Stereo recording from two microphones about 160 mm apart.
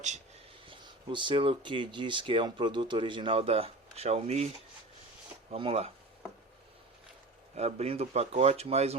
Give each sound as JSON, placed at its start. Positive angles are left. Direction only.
{"t": 0.6, "sound": "speech", "side_deg": -30}
{"t": 5.5, "sound": "speech", "side_deg": -40}
{"t": 7.5, "sound": "speech", "side_deg": -40}